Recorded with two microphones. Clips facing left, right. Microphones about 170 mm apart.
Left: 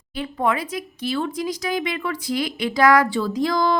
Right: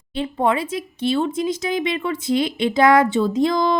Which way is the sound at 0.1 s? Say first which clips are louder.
Right 3 dB; 25° right (ahead or behind).